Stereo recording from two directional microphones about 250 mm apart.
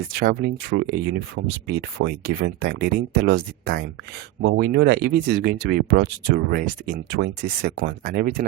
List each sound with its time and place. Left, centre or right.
0.1 s speech: right